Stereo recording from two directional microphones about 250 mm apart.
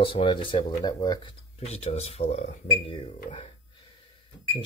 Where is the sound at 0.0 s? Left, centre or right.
Left.